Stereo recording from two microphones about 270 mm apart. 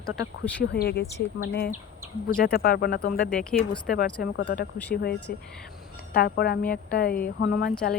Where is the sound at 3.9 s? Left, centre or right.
Left.